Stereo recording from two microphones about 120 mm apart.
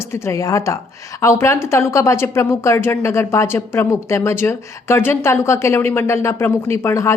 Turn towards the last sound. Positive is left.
turn(degrees=20)  # may be behind; listen again after turning